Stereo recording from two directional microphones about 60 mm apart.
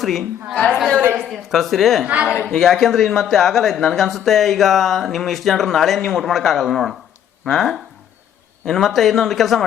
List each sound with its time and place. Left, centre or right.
0.0 s a woman's voice: centre
0.5 s a woman's voice: centre
1.3 s speech: centre
2.0 s a man's voice: right
2.5 s speech: centre